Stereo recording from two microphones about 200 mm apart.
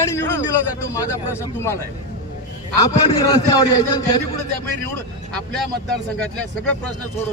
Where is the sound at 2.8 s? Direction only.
20° left (ahead or behind).